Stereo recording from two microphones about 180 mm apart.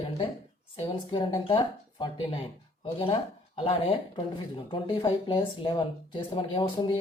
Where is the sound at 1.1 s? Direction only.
25° left (ahead or behind).